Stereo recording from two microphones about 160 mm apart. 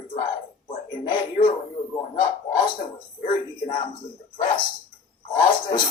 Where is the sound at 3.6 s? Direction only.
30° left (ahead or behind).